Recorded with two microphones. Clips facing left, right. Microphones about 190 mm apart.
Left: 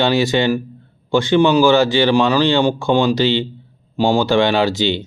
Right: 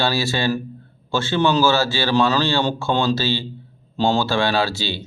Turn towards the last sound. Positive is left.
turn(degrees=20)  # may be behind; listen again after turning